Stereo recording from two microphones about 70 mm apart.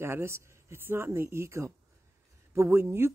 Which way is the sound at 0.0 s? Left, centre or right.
Right.